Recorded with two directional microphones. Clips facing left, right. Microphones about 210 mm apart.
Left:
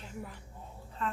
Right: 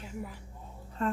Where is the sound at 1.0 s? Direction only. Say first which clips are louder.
Right 6 dB; 45° right (ahead or behind).